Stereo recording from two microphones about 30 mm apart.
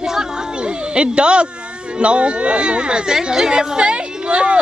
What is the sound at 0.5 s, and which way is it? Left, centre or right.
A woman's voice, right.